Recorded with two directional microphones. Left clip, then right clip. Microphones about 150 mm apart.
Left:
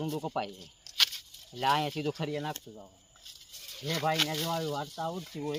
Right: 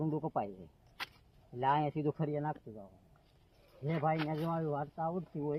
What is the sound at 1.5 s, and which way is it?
Speech, 15° left (ahead or behind).